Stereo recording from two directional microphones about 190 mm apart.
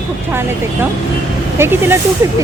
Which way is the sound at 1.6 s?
10° right (ahead or behind).